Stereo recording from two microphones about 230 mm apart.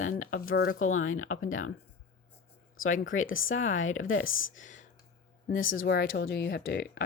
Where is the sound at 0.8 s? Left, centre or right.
Left.